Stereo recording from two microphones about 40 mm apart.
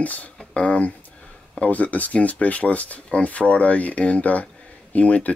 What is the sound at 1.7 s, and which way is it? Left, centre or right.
Speech, left.